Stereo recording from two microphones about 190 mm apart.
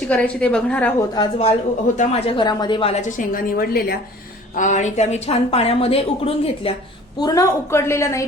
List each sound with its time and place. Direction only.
0.1 s a woman's voice: 5° left (ahead or behind)
1.1 s a woman's voice: 30° left (ahead or behind)
2.9 s a woman's voice: 40° left (ahead or behind)
4.5 s a woman's voice: 40° left (ahead or behind)
7.2 s a woman's voice: 20° left (ahead or behind)